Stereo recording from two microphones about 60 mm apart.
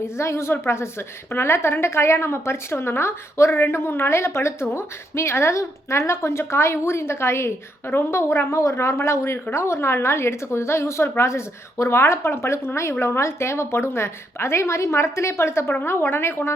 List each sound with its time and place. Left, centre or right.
0.0 s a woman's voice: left